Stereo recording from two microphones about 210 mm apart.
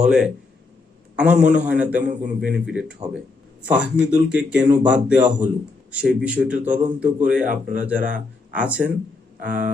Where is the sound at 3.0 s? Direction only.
30° right (ahead or behind).